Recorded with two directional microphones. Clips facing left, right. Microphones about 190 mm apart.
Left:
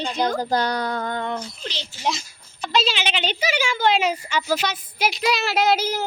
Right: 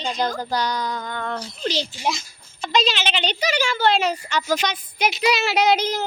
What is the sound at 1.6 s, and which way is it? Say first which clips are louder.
Speech: right 9 dB; 40° right (ahead or behind).